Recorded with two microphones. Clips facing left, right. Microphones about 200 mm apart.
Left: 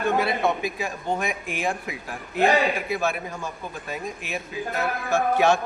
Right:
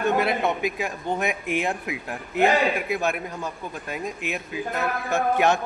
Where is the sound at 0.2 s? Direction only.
20° right (ahead or behind).